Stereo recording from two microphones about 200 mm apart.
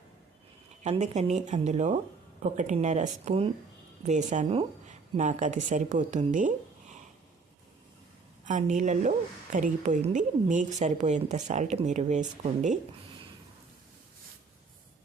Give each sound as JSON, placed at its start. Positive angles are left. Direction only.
{"t": 0.9, "sound": "a woman's voice", "side_deg": -35}
{"t": 8.4, "sound": "a woman's voice", "side_deg": -40}